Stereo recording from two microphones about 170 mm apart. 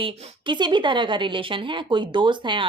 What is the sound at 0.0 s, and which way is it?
A woman's voice, 30° right (ahead or behind).